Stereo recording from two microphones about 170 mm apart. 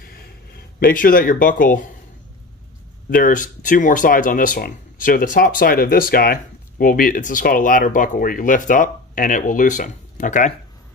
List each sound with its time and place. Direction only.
0.7 s speech: 60° left (ahead or behind)
3.1 s speech: 50° left (ahead or behind)